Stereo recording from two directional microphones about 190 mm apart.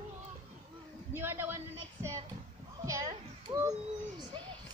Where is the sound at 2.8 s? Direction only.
20° right (ahead or behind).